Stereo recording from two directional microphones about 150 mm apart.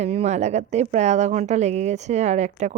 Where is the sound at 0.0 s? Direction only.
45° right (ahead or behind).